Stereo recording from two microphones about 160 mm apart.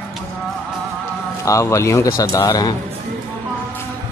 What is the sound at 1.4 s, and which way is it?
Speech, 20° left (ahead or behind).